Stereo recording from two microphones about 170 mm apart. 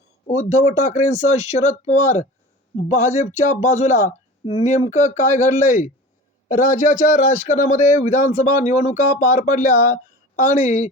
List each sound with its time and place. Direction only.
0.3 s speech: 40° left (ahead or behind)